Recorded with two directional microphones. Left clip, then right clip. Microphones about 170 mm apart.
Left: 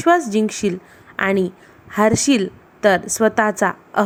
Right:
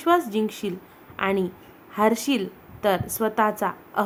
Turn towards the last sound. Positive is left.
turn(degrees=30)  # may be behind; listen again after turning